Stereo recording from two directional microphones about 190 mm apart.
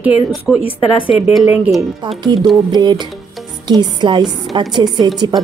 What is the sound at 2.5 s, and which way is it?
A woman's voice, 20° right (ahead or behind).